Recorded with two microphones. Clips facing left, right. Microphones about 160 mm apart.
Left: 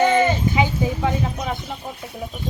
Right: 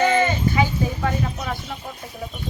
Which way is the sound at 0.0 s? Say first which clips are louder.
Left 2 dB; 15° left (ahead or behind).